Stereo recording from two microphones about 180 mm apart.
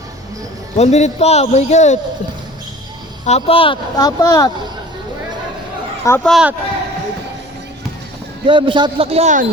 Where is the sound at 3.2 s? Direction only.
35° left (ahead or behind).